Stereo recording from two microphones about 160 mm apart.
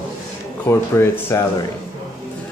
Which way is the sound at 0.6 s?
15° left (ahead or behind).